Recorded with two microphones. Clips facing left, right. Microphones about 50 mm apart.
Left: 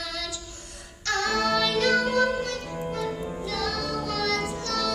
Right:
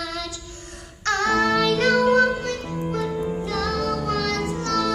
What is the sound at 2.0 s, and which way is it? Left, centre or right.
Music, right.